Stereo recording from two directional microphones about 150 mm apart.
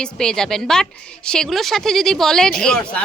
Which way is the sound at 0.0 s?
5° left (ahead or behind).